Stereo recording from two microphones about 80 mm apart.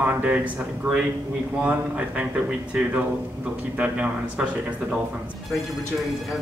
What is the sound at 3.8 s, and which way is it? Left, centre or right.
Speech, centre.